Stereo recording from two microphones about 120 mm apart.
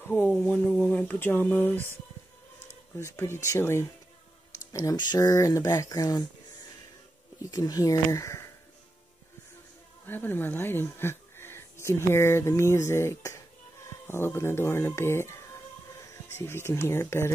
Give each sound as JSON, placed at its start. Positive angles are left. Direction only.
{"t": 0.1, "sound": "speech", "side_deg": 10}
{"t": 3.1, "sound": "speech", "side_deg": 25}
{"t": 4.7, "sound": "speech", "side_deg": 35}
{"t": 7.5, "sound": "speech", "side_deg": 30}
{"t": 10.0, "sound": "speech", "side_deg": 15}